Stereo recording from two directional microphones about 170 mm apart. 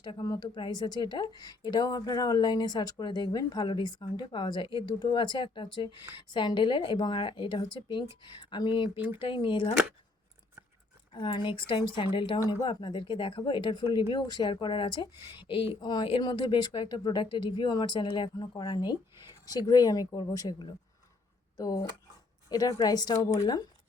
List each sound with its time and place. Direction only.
0.0 s speech: 25° left (ahead or behind)
11.1 s speech: 30° left (ahead or behind)